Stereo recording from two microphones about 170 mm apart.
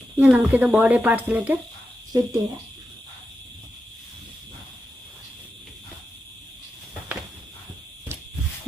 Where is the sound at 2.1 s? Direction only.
25° right (ahead or behind).